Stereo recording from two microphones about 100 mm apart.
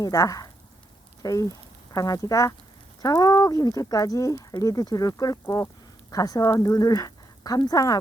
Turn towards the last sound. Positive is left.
turn(degrees=40)  # may be behind; listen again after turning